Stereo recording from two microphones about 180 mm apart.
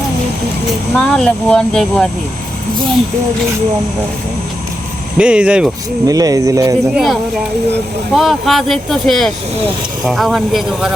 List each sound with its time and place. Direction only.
0.9 s speech: 5° left (ahead or behind)
5.1 s speech: 5° right (ahead or behind)
6.1 s speech: 20° right (ahead or behind)
6.9 s speech: centre (ahead or behind)